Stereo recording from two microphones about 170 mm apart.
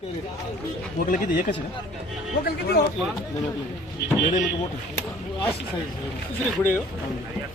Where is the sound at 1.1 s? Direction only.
55° left (ahead or behind).